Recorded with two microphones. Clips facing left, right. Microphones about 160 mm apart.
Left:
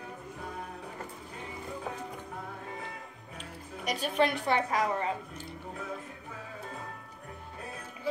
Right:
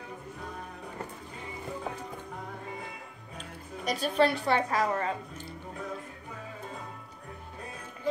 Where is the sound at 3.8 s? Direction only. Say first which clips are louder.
Right 2 dB; 40° right (ahead or behind).